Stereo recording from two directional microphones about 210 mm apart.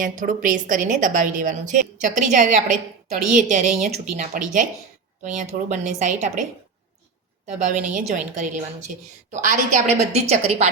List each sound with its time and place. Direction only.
0.0 s a woman's voice: 40° right (ahead or behind)
7.7 s a woman's voice: 35° right (ahead or behind)